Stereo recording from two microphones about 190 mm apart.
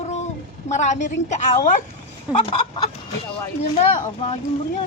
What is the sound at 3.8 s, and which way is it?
Speech, 35° left (ahead or behind).